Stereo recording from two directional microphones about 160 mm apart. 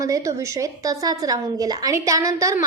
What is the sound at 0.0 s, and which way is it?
A woman's voice, 20° right (ahead or behind).